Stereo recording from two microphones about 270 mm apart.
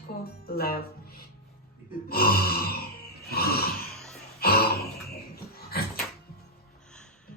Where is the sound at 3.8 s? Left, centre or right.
Centre.